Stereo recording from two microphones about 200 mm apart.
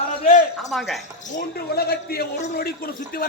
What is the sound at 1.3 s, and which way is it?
A man's voice, 50° left (ahead or behind).